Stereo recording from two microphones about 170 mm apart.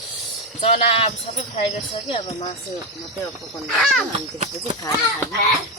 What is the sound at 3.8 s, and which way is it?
Speech, centre (ahead or behind).